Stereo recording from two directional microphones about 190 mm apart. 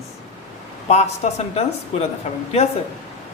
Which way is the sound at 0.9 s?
35° left (ahead or behind).